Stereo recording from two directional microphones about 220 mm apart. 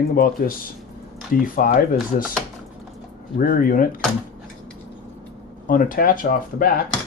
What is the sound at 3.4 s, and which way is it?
Speech, 40° left (ahead or behind).